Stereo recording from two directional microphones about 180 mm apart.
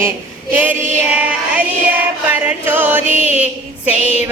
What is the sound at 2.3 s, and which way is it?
Chant, 10° right (ahead or behind).